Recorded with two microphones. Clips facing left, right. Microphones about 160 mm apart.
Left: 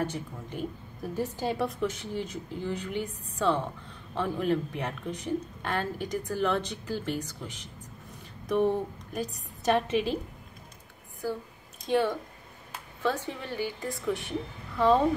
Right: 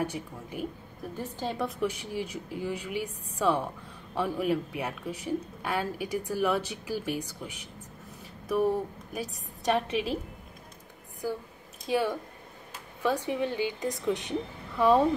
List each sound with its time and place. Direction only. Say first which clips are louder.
0.0 s speech: even; 10° right (ahead or behind)
1.1 s a woman's voice: left 4 dB; 5° left (ahead or behind)
1.8 s a woman's voice: even; 10° right (ahead or behind)
11.2 s speech: even; 15° right (ahead or behind)